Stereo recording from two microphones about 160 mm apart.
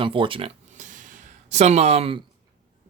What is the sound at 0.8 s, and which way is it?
Snort, 50° right (ahead or behind).